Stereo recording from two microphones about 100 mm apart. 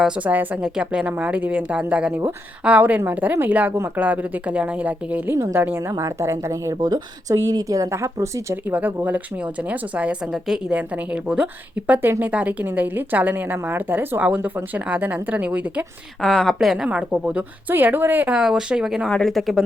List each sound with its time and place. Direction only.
0.2 s a woman's voice: 15° right (ahead or behind)
5.3 s speech: 30° right (ahead or behind)
5.5 s a woman's voice: 20° right (ahead or behind)
5.9 s speech: 30° right (ahead or behind)
8.7 s a woman's voice: 15° right (ahead or behind)
16.2 s a woman's voice: 10° left (ahead or behind)
16.6 s a woman's voice: 5° right (ahead or behind)
18.3 s speech: 5° right (ahead or behind)
19.0 s speech: 5° left (ahead or behind)